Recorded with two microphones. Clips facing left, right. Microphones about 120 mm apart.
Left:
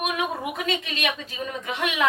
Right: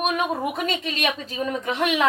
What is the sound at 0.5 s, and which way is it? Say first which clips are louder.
A woman's voice: right 2 dB; 35° right (ahead or behind).